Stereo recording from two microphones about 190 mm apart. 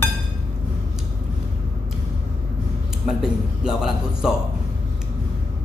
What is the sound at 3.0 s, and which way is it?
A woman's voice, 5° right (ahead or behind).